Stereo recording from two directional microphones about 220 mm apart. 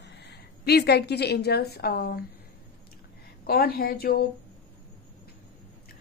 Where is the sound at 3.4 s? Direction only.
45° left (ahead or behind).